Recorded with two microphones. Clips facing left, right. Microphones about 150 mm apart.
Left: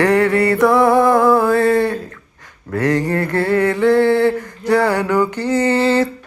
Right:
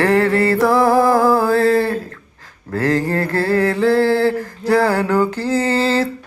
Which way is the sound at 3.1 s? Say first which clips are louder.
Left 1 dB; 35° right (ahead or behind).